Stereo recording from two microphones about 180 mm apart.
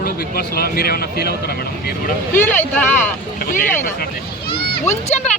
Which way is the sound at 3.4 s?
50° left (ahead or behind).